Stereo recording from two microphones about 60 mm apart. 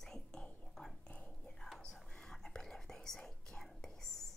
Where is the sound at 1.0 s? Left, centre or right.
Left.